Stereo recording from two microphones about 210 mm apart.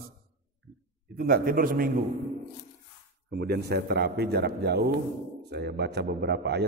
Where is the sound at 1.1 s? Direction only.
45° right (ahead or behind).